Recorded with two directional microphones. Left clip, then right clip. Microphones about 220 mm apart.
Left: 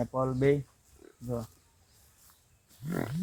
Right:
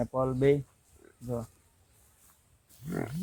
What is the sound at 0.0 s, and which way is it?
Speech, 5° right (ahead or behind).